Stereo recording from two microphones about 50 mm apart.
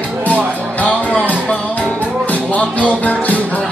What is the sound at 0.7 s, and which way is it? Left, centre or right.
Music, left.